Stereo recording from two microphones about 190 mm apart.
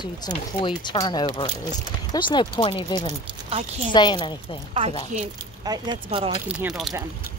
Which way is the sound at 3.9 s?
25° left (ahead or behind).